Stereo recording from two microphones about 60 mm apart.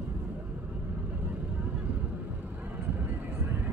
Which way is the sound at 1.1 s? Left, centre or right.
Right.